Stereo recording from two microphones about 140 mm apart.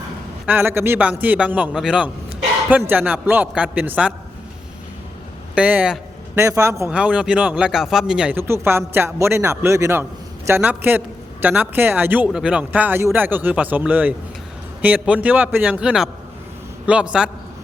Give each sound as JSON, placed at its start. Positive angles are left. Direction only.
{"t": 0.4, "sound": "a man's voice", "side_deg": -15}
{"t": 5.5, "sound": "a man's voice", "side_deg": -10}
{"t": 6.3, "sound": "a man's voice", "side_deg": -20}
{"t": 6.9, "sound": "a man's voice", "side_deg": -10}
{"t": 8.4, "sound": "a man's voice", "side_deg": -15}